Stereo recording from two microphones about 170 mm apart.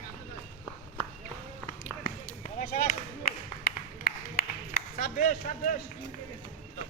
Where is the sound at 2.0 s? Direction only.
55° left (ahead or behind).